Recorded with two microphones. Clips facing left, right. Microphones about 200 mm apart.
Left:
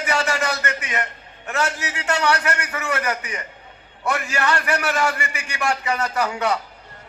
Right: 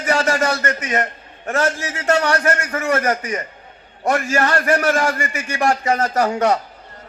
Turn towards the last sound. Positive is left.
turn(degrees=-45)  # may be behind; listen again after turning